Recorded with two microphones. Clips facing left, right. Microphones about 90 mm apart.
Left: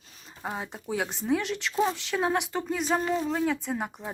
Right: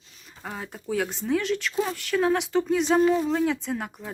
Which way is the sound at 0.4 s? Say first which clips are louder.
Even; 15° left (ahead or behind).